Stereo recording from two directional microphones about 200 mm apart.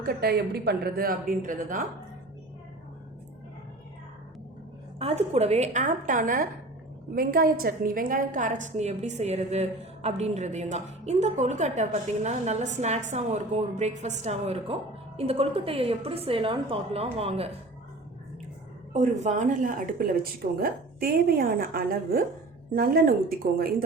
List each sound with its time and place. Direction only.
0.0 s speech: 50° right (ahead or behind)
4.9 s a woman's voice: 30° right (ahead or behind)
18.9 s a woman's voice: 35° right (ahead or behind)